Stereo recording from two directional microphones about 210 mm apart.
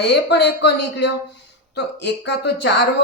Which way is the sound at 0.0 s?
50° left (ahead or behind).